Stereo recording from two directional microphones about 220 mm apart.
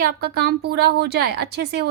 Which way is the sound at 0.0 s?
45° right (ahead or behind).